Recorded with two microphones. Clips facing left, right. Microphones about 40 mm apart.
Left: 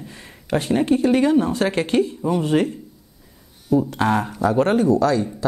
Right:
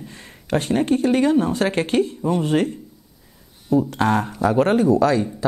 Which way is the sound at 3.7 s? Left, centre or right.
Centre.